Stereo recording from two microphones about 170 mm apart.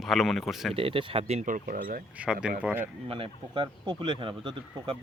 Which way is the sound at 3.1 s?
30° right (ahead or behind).